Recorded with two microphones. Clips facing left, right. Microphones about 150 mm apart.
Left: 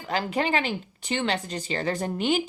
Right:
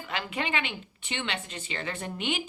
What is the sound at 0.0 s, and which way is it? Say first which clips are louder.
A woman's voice: left 6 dB; 40° left (ahead or behind).